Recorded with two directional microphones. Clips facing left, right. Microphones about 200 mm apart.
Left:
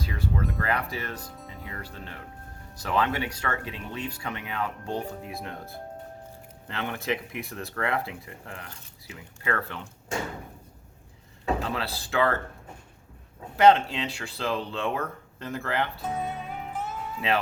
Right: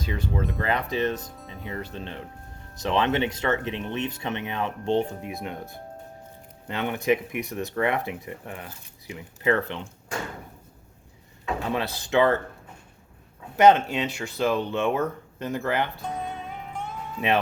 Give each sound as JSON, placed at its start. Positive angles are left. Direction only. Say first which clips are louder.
{"t": 0.0, "sound": "speech", "louder": "right 2 dB", "side_deg": -20}
{"t": 11.7, "sound": "speech", "louder": "right 5 dB", "side_deg": -20}
{"t": 13.6, "sound": "speech", "louder": "right 2 dB", "side_deg": -20}
{"t": 16.0, "sound": "speech", "louder": "left 1 dB", "side_deg": 5}